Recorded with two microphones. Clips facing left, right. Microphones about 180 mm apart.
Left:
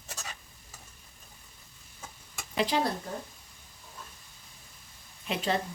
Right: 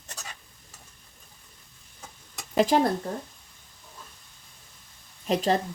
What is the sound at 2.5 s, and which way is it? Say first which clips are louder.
Speech: right 7 dB; 45° right (ahead or behind).